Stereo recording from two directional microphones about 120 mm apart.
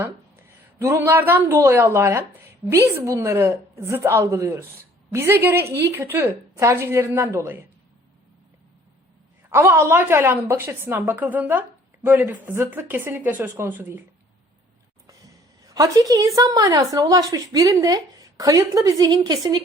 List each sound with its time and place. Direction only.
0.8 s a woman's voice: 25° right (ahead or behind)
9.5 s a woman's voice: 20° right (ahead or behind)
15.6 s a woman's voice: 30° right (ahead or behind)